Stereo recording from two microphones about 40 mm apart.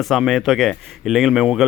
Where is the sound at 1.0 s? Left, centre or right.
Centre.